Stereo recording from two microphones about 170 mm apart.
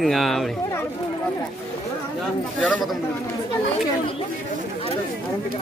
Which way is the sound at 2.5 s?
10° left (ahead or behind).